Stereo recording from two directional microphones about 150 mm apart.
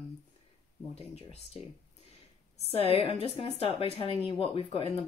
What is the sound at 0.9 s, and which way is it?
Speech, 45° left (ahead or behind).